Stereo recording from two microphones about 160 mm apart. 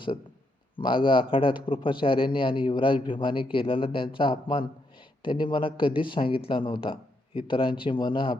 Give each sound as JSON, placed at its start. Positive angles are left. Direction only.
{"t": 0.8, "sound": "a man's voice", "side_deg": 30}